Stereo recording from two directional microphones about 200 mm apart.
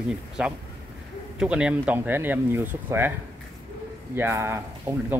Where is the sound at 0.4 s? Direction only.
5° right (ahead or behind).